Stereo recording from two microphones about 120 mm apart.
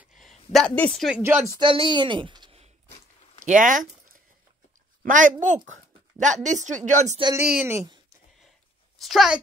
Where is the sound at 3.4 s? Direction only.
90° right.